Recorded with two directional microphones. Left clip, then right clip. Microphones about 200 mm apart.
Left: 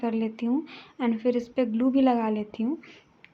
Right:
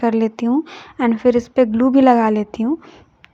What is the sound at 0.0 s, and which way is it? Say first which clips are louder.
Speech: right 11 dB; 40° right (ahead or behind).